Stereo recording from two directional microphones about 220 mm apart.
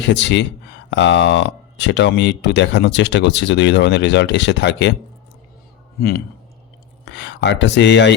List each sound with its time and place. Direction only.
0.0 s speech: 50° left (ahead or behind)
6.0 s speech: 45° left (ahead or behind)